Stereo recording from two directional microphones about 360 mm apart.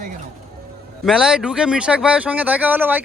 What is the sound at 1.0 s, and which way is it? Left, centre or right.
Speech, centre.